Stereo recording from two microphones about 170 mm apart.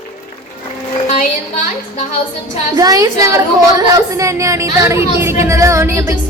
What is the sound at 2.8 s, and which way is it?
A woman's voice, 20° right (ahead or behind).